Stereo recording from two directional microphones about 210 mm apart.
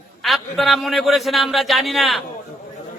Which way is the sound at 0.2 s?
Centre (ahead or behind).